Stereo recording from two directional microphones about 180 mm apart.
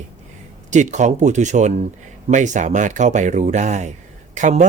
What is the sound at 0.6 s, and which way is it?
Speech, 40° right (ahead or behind).